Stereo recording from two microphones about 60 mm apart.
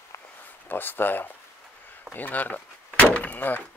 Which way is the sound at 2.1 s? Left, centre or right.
Left.